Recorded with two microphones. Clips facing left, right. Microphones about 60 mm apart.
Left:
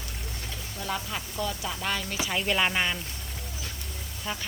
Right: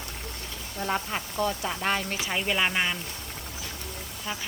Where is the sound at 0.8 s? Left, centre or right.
Right.